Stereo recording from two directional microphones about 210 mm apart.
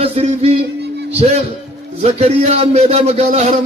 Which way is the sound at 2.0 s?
30° right (ahead or behind).